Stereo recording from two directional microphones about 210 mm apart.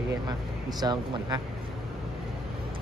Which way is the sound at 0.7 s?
20° right (ahead or behind).